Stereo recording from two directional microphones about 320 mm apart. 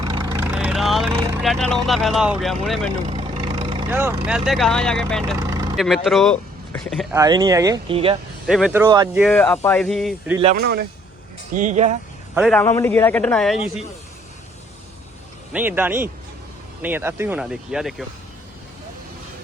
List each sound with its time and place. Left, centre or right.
0.0 s vehicle: centre
1.5 s a man's voice: centre
3.1 s speech: centre
5.4 s vehicle: centre
5.8 s a man's voice: centre
7.2 s speech: centre
8.4 s a man's voice: centre
9.2 s a man's voice: centre
10.4 s speech: right
12.3 s a man's voice: centre
15.5 s a man's voice: centre